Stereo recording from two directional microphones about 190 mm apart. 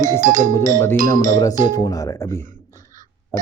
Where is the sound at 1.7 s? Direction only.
20° left (ahead or behind).